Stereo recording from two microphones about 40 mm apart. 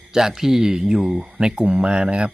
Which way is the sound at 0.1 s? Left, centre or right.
Centre.